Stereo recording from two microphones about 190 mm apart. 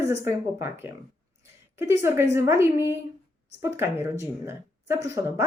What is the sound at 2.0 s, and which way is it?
A woman's voice, 15° right (ahead or behind).